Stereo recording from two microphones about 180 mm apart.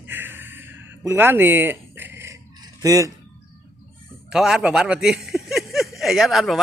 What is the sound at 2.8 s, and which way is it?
Speech, 20° right (ahead or behind).